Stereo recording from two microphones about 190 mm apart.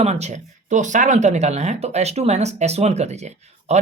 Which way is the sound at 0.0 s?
35° right (ahead or behind).